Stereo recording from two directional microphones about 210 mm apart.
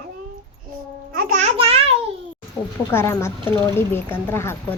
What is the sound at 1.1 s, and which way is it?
Speech, 40° right (ahead or behind).